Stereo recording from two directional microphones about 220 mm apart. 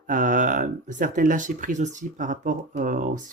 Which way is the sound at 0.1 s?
35° right (ahead or behind).